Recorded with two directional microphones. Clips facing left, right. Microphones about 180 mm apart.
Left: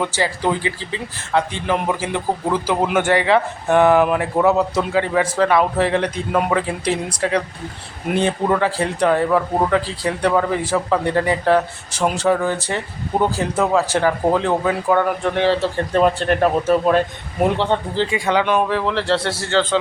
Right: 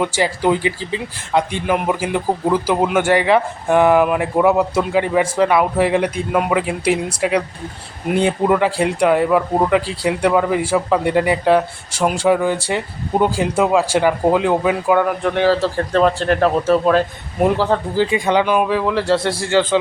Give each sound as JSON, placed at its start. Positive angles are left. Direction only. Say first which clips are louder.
{"t": 0.0, "sound": "a man's voice", "louder": "right 3 dB", "side_deg": -10}
{"t": 15.9, "sound": "speech", "louder": "right 1 dB", "side_deg": 10}
{"t": 17.4, "sound": "speech", "louder": "right 2 dB", "side_deg": -5}
{"t": 18.1, "sound": "a man's voice", "louder": "right 1 dB", "side_deg": -20}